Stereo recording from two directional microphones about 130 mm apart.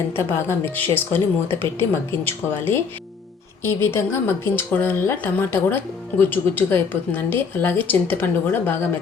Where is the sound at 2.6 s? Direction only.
15° left (ahead or behind).